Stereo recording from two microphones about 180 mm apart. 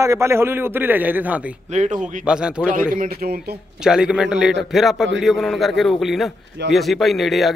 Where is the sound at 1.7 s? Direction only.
40° right (ahead or behind).